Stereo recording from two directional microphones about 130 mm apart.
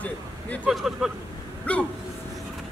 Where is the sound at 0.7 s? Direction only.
Centre (ahead or behind).